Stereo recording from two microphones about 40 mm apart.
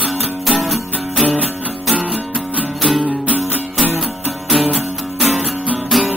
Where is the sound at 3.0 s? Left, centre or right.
Right.